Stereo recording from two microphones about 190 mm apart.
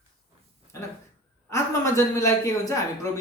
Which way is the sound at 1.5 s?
15° left (ahead or behind).